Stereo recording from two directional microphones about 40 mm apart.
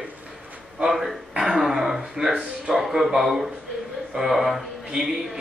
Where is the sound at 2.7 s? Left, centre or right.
Centre.